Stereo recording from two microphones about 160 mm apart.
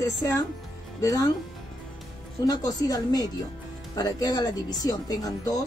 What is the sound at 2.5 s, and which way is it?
Speech, 25° left (ahead or behind).